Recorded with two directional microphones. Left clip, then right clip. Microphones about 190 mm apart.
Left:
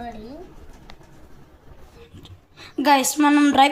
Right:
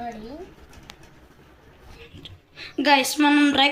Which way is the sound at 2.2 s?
40° left (ahead or behind).